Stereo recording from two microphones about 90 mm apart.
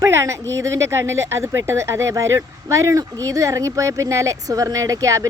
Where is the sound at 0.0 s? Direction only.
35° right (ahead or behind).